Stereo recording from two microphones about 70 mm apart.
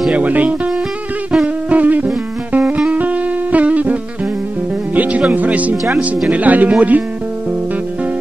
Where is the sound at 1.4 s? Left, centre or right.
Right.